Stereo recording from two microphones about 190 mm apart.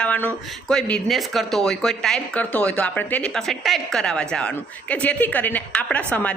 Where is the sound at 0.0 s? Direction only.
5° left (ahead or behind).